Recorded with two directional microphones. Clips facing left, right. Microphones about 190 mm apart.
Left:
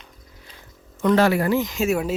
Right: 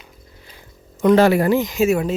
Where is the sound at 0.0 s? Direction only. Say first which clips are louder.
Right 2 dB; 5° right (ahead or behind).